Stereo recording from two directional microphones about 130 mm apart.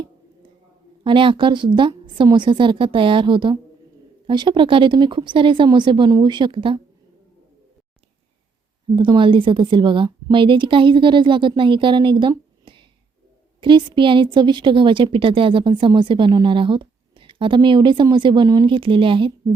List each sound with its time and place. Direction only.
1.0 s a woman's voice: 40° right (ahead or behind)
9.0 s a woman's voice: 40° right (ahead or behind)
13.6 s a woman's voice: 40° right (ahead or behind)